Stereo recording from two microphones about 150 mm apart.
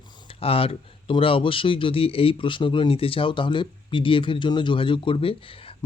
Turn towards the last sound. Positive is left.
turn(degrees=35)  # may be behind; listen again after turning